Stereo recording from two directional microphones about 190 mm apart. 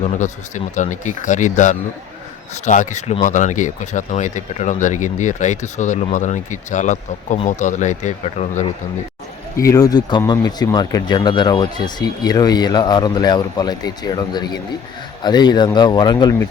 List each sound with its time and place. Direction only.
0.0 s speech: 40° left (ahead or behind)
9.6 s speech: 20° left (ahead or behind)